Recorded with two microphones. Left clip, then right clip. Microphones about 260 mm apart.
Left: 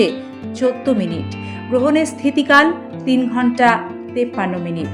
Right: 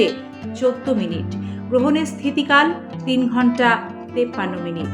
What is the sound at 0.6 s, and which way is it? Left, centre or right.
A woman's voice, left.